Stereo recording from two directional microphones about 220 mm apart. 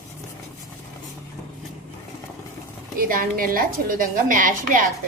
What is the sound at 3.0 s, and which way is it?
A woman's voice, 40° right (ahead or behind).